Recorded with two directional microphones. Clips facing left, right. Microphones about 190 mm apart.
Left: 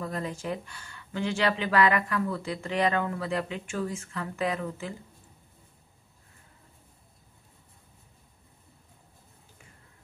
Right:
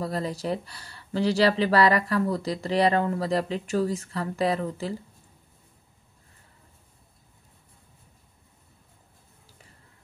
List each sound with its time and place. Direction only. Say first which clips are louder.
0.0 s speech: right 4 dB; 35° right (ahead or behind)